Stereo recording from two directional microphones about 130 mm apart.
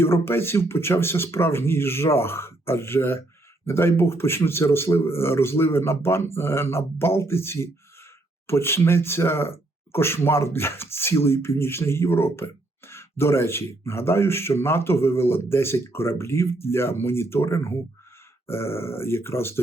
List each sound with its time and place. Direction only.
0.0 s speech: 20° left (ahead or behind)